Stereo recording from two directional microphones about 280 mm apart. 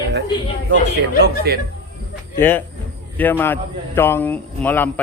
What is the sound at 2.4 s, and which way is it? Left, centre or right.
A man's voice, centre.